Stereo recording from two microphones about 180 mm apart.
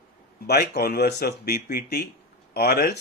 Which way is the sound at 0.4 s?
60° left (ahead or behind).